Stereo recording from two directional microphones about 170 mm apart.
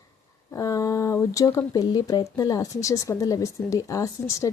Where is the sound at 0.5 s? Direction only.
20° left (ahead or behind).